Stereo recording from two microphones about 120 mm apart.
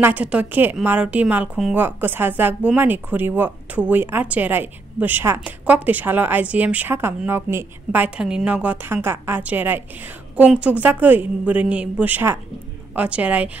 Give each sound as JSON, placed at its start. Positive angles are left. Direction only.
{"t": 0.0, "sound": "speech", "side_deg": -10}